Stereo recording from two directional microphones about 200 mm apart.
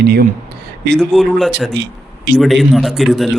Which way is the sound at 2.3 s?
Centre (ahead or behind).